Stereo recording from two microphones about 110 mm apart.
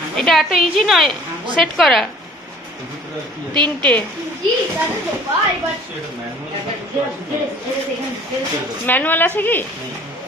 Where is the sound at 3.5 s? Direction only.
15° left (ahead or behind).